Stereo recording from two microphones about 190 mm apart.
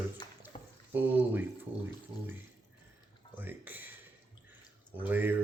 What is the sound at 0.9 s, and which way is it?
Speech, 10° right (ahead or behind).